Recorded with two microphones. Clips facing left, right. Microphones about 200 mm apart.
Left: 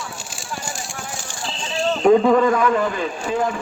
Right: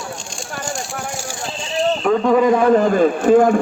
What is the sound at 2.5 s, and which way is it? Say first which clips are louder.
A man's voice: right 6 dB; 35° right (ahead or behind).